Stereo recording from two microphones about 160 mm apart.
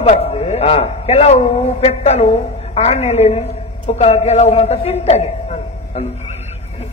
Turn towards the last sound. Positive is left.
turn(degrees=45)  # may be behind; listen again after turning